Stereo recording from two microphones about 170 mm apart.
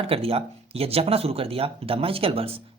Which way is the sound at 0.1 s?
35° right (ahead or behind).